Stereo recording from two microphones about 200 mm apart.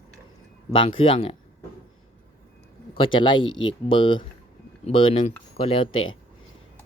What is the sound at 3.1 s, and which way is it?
Speech, 25° left (ahead or behind).